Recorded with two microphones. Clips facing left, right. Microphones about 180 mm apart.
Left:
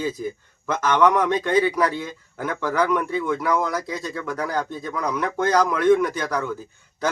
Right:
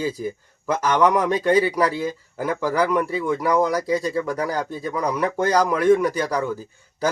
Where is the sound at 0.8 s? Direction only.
10° right (ahead or behind).